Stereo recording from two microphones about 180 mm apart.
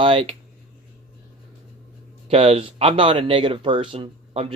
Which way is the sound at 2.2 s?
35° right (ahead or behind).